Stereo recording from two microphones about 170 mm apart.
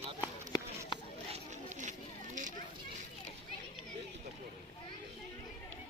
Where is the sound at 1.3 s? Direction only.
45° right (ahead or behind).